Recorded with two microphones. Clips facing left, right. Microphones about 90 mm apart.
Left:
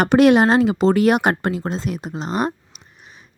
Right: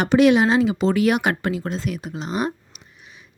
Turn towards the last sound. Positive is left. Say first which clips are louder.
# left 1 dB
turn(degrees=40)  # may be behind; listen again after turning